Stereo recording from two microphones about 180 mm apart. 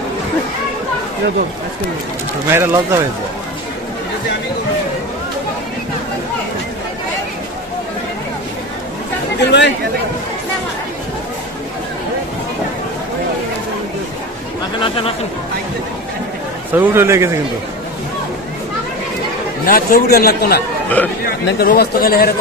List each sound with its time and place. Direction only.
2.5 s a man's voice: 15° right (ahead or behind)
9.4 s speech: 75° left (ahead or behind)
14.8 s a man's voice: 30° left (ahead or behind)
16.7 s a man's voice: 15° right (ahead or behind)
19.6 s speech: 55° left (ahead or behind)
21.0 s speech: 10° left (ahead or behind)
21.3 s speech: 60° left (ahead or behind)